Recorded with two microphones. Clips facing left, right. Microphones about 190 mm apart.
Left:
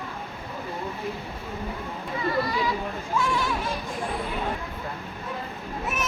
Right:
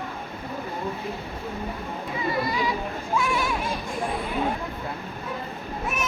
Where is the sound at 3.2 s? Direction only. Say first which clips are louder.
Left 1 dB; 10° right (ahead or behind).